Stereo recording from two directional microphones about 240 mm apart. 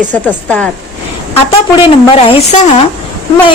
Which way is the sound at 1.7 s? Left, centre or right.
Left.